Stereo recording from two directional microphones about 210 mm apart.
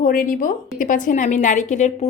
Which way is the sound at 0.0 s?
40° left (ahead or behind).